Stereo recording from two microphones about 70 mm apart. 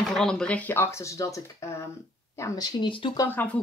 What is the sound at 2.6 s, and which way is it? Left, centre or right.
Speech, left.